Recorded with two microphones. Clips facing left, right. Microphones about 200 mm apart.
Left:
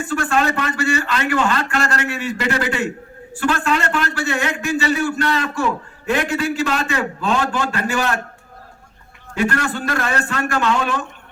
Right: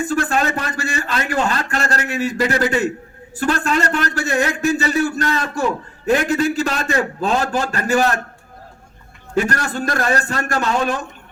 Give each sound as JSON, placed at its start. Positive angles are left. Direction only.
{"t": 0.1, "sound": "a man's voice", "side_deg": -40}
{"t": 9.3, "sound": "a man's voice", "side_deg": -40}